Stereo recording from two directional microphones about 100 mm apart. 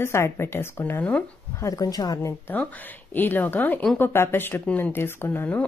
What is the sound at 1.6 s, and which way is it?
Speech, 35° left (ahead or behind).